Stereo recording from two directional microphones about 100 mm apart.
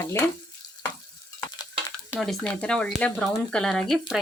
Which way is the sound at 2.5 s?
10° left (ahead or behind).